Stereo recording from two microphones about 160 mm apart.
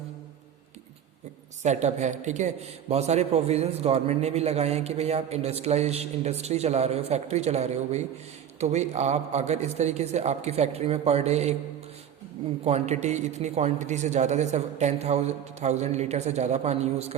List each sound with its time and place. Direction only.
1.6 s a man's voice: 45° right (ahead or behind)
12.6 s a man's voice: 40° right (ahead or behind)